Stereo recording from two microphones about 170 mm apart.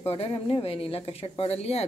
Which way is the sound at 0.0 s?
35° left (ahead or behind).